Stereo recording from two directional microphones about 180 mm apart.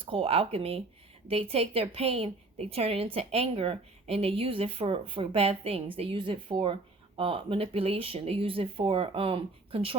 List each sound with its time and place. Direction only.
0.0 s a woman's voice: 30° right (ahead or behind)